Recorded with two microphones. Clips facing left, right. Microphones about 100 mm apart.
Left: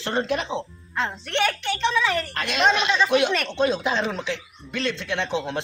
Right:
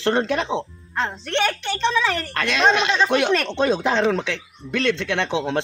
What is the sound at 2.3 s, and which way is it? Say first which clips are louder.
Speech: right 4 dB; 90° right.